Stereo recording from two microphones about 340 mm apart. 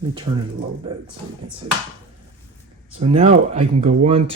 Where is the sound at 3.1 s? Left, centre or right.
Centre.